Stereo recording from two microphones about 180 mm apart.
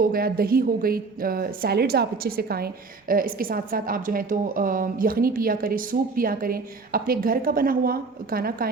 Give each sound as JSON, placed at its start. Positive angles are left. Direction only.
{"t": 0.0, "sound": "a woman's voice", "side_deg": -55}